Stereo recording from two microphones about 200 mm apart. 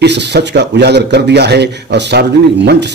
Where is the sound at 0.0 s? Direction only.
60° right (ahead or behind).